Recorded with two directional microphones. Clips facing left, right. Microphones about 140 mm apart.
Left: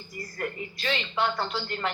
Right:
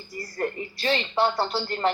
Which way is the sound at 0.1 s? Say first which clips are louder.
Right 5 dB; 35° right (ahead or behind).